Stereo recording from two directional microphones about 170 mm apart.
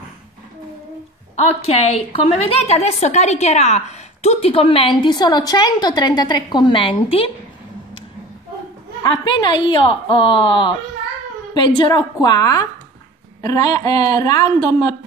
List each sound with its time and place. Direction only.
1.4 s a woman's voice: 35° left (ahead or behind)
9.0 s a woman's voice: 30° left (ahead or behind)